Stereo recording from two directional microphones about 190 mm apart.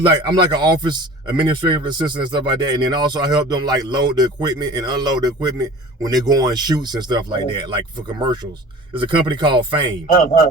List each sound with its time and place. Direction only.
0.2 s speech: 20° right (ahead or behind)
9.0 s speech: 25° right (ahead or behind)
10.1 s a man's voice: 45° left (ahead or behind)